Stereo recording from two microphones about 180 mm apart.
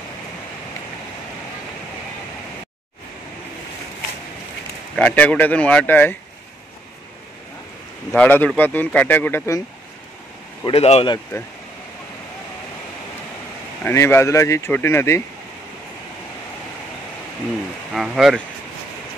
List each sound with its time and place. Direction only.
4.9 s speech: 5° left (ahead or behind)
8.1 s speech: 10° left (ahead or behind)
10.6 s speech: 35° left (ahead or behind)
13.8 s speech: 15° left (ahead or behind)
17.9 s speech: centre (ahead or behind)